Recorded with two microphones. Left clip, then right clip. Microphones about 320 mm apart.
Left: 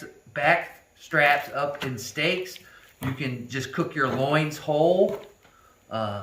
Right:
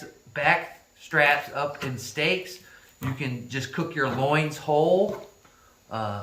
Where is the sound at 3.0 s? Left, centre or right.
Centre.